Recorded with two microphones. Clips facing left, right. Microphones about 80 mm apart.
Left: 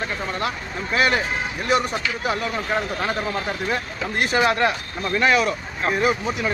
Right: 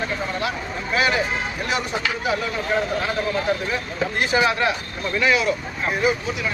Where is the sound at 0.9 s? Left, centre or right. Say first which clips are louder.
Left 1 dB; left.